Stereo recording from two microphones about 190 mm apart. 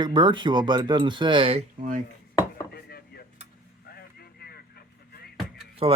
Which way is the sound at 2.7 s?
55° left (ahead or behind).